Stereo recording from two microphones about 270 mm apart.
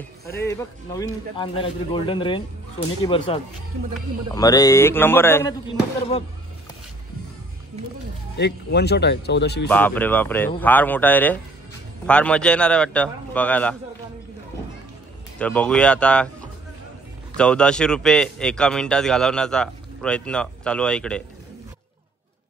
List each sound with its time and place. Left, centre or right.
0.3 s a man's voice: centre
4.4 s a man's voice: centre
8.4 s speech: left
9.7 s a man's voice: centre
15.3 s speech: centre
17.4 s speech: centre